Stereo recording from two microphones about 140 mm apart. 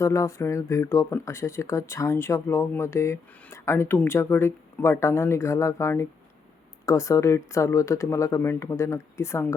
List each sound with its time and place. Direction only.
0.0 s speech: 20° left (ahead or behind)